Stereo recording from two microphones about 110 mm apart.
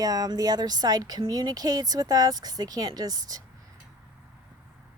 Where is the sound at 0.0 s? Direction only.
35° right (ahead or behind).